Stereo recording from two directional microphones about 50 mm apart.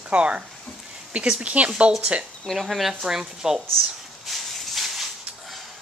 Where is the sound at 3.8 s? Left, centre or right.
Centre.